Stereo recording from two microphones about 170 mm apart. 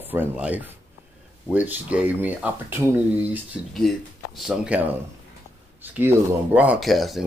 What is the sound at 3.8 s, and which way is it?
Speech, centre (ahead or behind).